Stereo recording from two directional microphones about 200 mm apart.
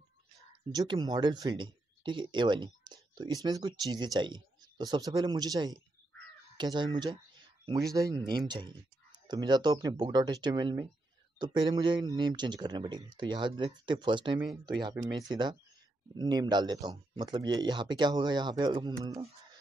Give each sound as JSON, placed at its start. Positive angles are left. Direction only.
{"t": 0.7, "sound": "speech", "side_deg": -20}